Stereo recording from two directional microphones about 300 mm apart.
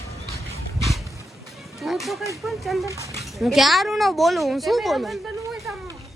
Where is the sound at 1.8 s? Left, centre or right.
Centre.